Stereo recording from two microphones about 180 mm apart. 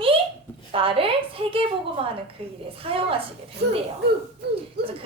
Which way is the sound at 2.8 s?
30° right (ahead or behind).